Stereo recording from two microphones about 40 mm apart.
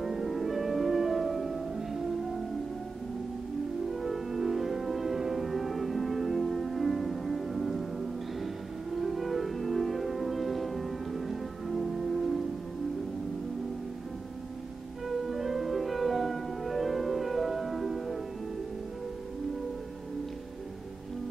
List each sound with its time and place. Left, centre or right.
0.0 s music: centre
3.9 s music: centre
8.9 s music: centre
15.0 s music: centre